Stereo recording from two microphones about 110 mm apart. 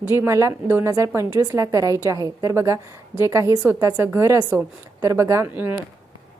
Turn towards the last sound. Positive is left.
turn(degrees=-15)  # may be behind; listen again after turning